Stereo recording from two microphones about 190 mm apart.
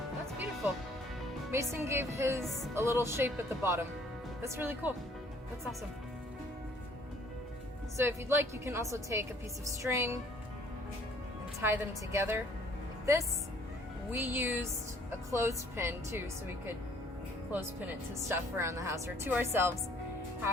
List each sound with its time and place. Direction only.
1.5 s speech: 15° right (ahead or behind)
2.4 s music: centre (ahead or behind)
2.7 s speech: 15° right (ahead or behind)
7.9 s speech: 10° right (ahead or behind)
11.6 s speech: 10° right (ahead or behind)
17.5 s speech: 10° right (ahead or behind)